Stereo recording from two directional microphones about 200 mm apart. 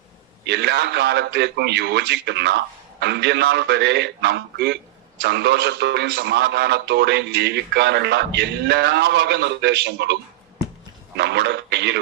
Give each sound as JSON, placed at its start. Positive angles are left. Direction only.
{"t": 0.4, "sound": "a man's voice", "side_deg": -60}
{"t": 11.2, "sound": "a man's voice", "side_deg": -60}